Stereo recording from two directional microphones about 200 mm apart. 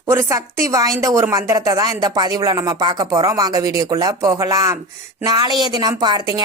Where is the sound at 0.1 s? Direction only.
15° right (ahead or behind).